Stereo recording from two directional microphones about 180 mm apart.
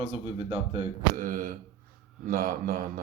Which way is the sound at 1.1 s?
50° right (ahead or behind).